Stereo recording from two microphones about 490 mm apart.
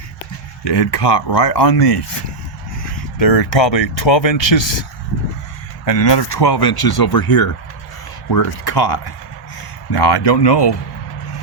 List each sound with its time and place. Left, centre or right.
0.6 s speech: left
3.2 s speech: left
5.8 s speech: left